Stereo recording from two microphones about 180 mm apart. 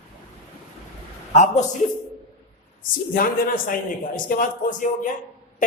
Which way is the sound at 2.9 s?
50° left (ahead or behind).